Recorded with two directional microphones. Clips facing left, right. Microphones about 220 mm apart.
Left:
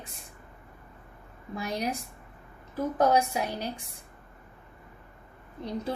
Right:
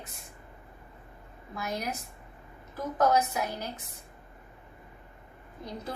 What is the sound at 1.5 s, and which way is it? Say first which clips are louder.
A woman's voice: left 3 dB; 30° left (ahead or behind).